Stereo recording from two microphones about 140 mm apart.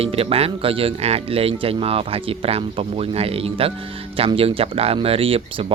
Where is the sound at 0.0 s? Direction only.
45° right (ahead or behind).